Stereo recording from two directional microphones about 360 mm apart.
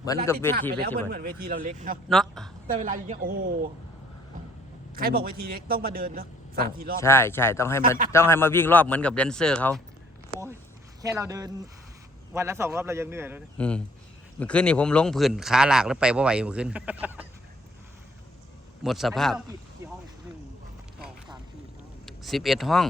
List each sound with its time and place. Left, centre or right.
0.1 s speech: centre
0.8 s a man's voice: right
2.0 s speech: centre
2.6 s a man's voice: right
4.9 s a man's voice: right
7.0 s speech: centre
11.0 s a man's voice: centre
18.8 s speech: centre
22.0 s speech: centre